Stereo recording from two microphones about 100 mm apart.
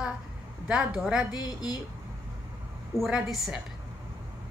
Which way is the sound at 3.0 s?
5° right (ahead or behind).